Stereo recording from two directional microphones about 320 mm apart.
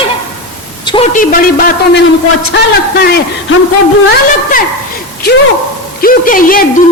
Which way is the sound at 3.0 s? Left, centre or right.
Left.